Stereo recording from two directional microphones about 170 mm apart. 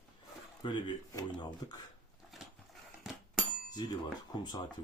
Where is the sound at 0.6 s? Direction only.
30° left (ahead or behind).